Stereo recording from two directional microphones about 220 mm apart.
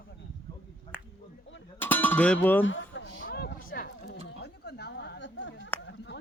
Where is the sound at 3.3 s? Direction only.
45° left (ahead or behind).